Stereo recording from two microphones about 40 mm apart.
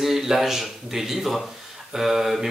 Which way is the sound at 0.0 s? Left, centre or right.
Centre.